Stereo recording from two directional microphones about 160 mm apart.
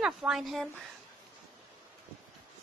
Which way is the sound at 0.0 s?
5° right (ahead or behind).